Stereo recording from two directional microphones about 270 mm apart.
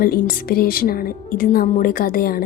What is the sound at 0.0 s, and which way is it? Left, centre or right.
A woman's voice, left.